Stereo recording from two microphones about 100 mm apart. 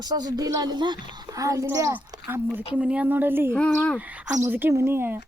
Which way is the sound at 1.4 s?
35° right (ahead or behind).